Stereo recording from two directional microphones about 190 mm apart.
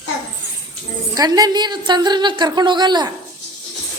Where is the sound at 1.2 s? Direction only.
20° right (ahead or behind).